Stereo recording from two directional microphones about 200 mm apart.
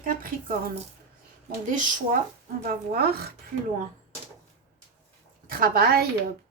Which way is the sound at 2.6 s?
50° right (ahead or behind).